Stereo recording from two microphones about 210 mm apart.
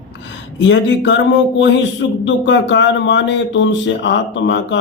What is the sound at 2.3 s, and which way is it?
Speech, 55° left (ahead or behind).